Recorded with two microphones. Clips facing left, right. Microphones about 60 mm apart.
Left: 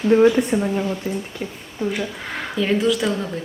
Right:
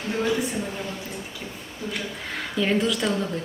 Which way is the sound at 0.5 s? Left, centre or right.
Left.